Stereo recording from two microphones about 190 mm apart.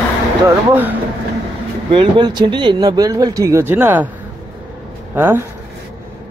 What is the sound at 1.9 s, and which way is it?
Speech, 25° right (ahead or behind).